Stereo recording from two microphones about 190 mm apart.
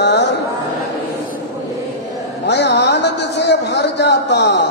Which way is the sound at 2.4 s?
65° left (ahead or behind).